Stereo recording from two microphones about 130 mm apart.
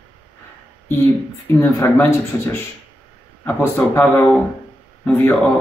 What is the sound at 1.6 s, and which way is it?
A man's voice, 20° left (ahead or behind).